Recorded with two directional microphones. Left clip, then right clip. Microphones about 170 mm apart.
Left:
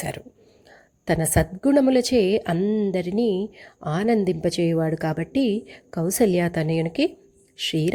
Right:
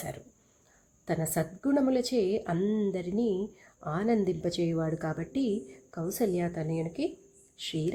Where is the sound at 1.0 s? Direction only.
30° left (ahead or behind).